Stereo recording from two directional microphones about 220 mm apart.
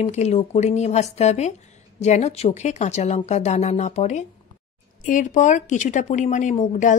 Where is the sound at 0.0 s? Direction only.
30° left (ahead or behind).